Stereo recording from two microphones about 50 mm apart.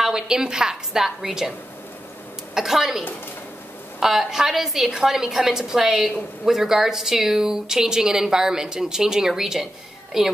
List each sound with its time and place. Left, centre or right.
0.0 s speech: centre
2.5 s speech: centre